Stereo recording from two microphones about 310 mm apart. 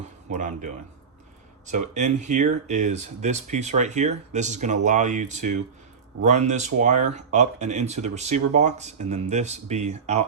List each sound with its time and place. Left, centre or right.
0.3 s speech: right
1.9 s speech: right